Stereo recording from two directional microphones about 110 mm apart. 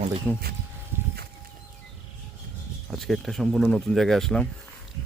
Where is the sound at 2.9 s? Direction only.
Centre (ahead or behind).